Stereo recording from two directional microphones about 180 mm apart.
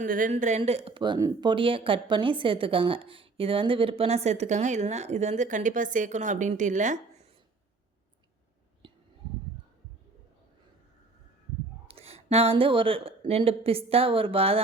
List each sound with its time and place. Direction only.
0.0 s speech: 45° right (ahead or behind)
8.8 s a sound: 25° right (ahead or behind)
11.9 s speech: 35° right (ahead or behind)